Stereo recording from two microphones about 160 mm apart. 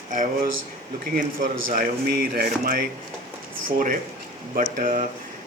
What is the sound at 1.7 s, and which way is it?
Speech, 65° right (ahead or behind).